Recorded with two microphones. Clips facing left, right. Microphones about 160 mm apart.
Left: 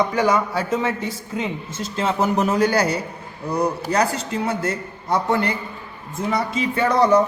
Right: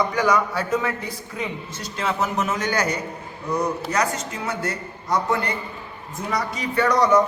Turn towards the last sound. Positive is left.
turn(degrees=30)  # may be behind; listen again after turning